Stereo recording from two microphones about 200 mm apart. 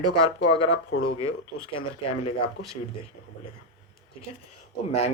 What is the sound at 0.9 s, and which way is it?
Speech, 90° left.